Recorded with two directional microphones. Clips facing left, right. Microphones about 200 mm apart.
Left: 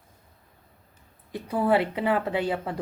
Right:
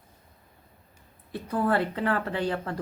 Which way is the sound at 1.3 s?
10° left (ahead or behind).